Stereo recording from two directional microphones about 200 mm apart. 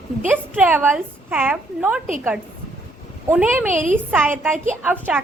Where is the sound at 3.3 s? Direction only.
10° right (ahead or behind).